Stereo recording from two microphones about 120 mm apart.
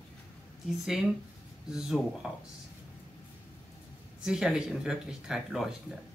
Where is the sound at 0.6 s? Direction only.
5° right (ahead or behind).